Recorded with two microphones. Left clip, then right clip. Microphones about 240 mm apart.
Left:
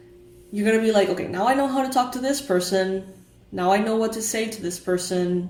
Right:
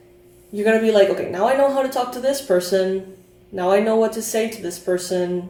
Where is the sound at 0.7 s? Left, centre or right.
Left.